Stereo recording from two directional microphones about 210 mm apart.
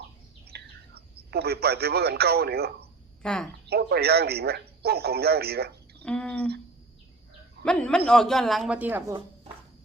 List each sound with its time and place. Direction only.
0.5 s a man's voice: 50° right (ahead or behind)
3.2 s speech: 5° left (ahead or behind)
3.7 s speech: 50° right (ahead or behind)
6.0 s speech: 5° left (ahead or behind)
7.6 s speech: 5° left (ahead or behind)